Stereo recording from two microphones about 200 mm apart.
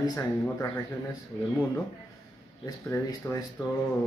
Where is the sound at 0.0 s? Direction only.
15° left (ahead or behind).